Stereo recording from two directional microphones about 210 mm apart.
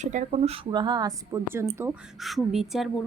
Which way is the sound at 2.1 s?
Centre (ahead or behind).